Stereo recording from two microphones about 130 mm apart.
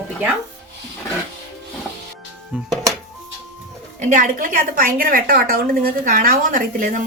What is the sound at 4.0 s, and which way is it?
Speech, 75° right (ahead or behind).